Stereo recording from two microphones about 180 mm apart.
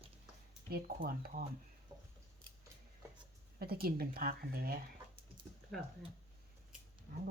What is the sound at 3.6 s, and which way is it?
Speech, 55° right (ahead or behind).